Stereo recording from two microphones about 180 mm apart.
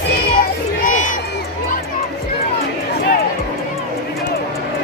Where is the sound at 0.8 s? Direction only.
45° left (ahead or behind).